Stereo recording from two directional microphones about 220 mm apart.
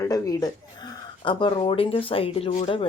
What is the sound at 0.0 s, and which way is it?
Speech, 15° left (ahead or behind).